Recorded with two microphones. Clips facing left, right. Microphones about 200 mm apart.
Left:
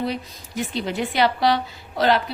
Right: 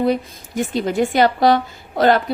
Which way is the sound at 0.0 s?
50° right (ahead or behind).